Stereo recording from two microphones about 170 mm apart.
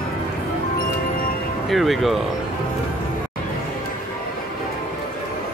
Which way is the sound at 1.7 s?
Centre (ahead or behind).